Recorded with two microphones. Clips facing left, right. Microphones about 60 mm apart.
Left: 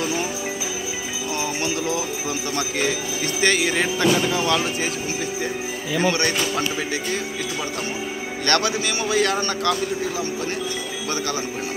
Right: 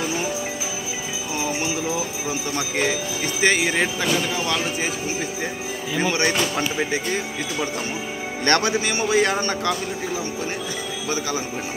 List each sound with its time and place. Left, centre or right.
1.3 s speech: centre
5.9 s speech: centre
8.5 s a man's voice: right
9.0 s speech: centre